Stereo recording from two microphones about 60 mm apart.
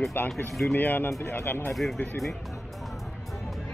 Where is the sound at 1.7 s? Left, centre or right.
Centre.